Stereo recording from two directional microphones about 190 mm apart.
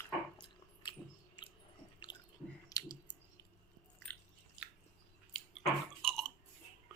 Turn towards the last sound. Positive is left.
turn(degrees=0)  # may be behind; listen again after turning